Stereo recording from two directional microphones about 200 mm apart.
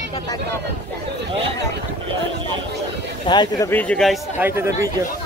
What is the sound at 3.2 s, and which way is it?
Speech, 20° left (ahead or behind).